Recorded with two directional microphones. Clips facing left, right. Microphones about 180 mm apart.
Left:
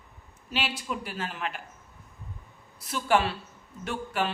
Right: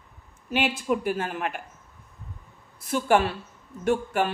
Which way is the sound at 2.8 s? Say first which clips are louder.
Right 4 dB; 50° right (ahead or behind).